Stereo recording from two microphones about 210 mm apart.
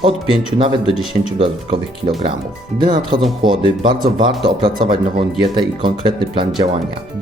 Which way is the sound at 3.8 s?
25° right (ahead or behind).